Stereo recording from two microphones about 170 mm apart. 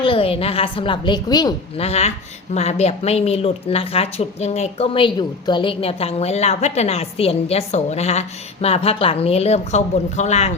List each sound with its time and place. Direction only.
0.0 s a woman's voice: 30° left (ahead or behind)
1.8 s a woman's voice: 40° left (ahead or behind)